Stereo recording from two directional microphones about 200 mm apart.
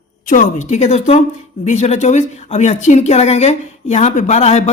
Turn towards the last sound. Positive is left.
turn(degrees=35)  # may be behind; listen again after turning